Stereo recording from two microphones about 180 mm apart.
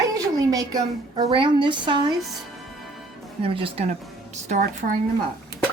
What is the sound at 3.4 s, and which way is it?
Speech, 30° right (ahead or behind).